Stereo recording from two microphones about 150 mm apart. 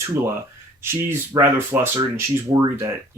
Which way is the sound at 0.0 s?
20° right (ahead or behind).